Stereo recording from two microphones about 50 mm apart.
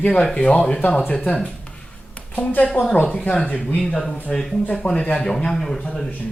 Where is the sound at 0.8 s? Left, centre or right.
Left.